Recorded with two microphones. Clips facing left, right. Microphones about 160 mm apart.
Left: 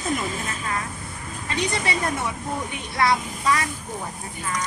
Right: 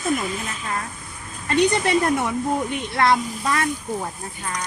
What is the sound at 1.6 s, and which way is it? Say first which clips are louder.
Speech: right 7 dB; 60° right (ahead or behind).